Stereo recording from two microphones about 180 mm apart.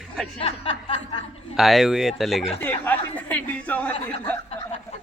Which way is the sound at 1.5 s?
Centre (ahead or behind).